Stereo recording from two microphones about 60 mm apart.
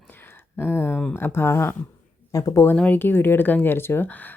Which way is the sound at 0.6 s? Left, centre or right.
Left.